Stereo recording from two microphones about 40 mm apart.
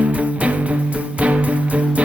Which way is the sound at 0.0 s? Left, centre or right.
Right.